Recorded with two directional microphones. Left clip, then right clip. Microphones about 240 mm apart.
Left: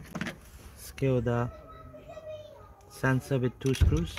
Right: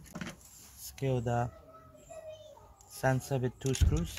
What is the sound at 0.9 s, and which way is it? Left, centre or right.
Speech, centre.